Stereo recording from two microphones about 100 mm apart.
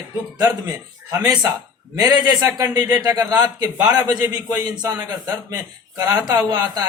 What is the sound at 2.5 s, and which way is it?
A man's voice, 35° right (ahead or behind).